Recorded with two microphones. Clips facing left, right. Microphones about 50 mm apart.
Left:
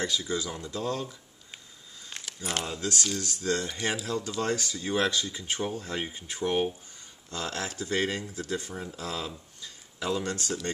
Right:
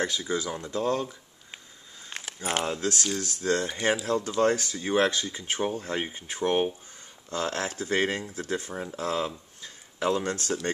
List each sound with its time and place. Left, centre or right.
0.0 s speech: right
0.6 s speech: right
2.0 s keys jangling: right
2.6 s speech: right
9.6 s a sound: right